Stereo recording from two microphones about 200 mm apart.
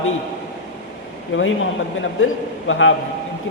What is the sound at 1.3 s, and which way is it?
A man's voice, 70° left (ahead or behind).